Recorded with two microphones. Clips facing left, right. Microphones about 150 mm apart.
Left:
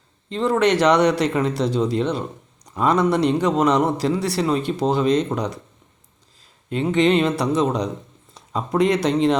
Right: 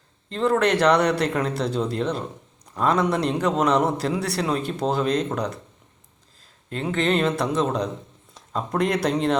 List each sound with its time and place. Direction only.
0.3 s a man's voice: centre (ahead or behind)
6.7 s a man's voice: centre (ahead or behind)